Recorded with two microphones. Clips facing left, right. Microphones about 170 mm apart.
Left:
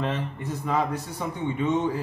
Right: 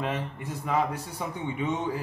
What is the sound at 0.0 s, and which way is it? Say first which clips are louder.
Speech: left 2 dB; 10° right (ahead or behind).